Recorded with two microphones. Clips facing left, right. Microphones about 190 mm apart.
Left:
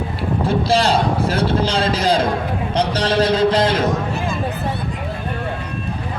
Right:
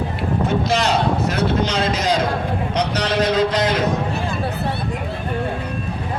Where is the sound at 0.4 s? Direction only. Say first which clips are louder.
Left 3 dB; 30° left (ahead or behind).